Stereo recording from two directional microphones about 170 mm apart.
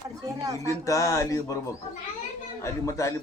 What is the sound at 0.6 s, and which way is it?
Speech, 20° left (ahead or behind).